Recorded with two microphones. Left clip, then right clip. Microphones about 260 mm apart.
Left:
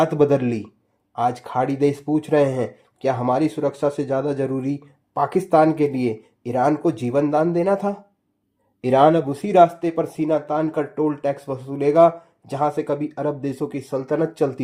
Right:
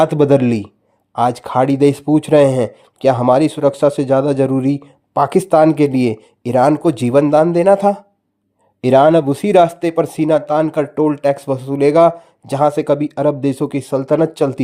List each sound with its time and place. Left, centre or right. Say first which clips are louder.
0.0 s speech: right 6 dB; right